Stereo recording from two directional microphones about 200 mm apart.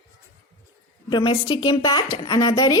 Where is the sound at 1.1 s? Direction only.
25° left (ahead or behind).